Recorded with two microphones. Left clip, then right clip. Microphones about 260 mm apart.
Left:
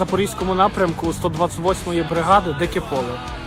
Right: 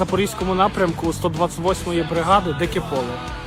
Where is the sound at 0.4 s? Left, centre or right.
Centre.